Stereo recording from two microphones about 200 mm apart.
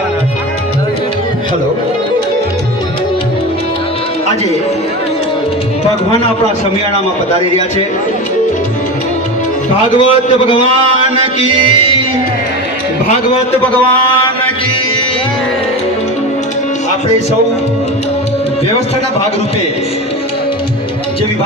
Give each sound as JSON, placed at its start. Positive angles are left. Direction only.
{"t": 9.9, "sound": "a man's voice", "side_deg": 25}